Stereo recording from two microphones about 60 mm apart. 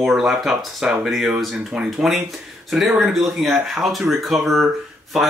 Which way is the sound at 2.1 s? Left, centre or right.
Centre.